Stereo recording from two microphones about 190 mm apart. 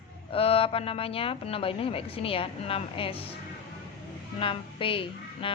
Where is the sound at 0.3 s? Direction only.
30° left (ahead or behind).